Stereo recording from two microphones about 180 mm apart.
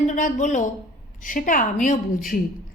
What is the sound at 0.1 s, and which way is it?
A woman's voice, 45° left (ahead or behind).